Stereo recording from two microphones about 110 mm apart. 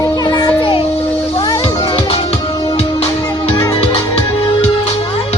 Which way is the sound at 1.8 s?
60° left (ahead or behind).